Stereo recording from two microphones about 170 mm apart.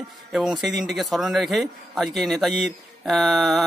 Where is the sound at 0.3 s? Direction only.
Centre (ahead or behind).